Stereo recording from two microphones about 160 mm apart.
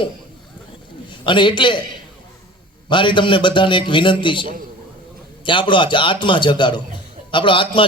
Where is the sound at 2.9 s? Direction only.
30° left (ahead or behind).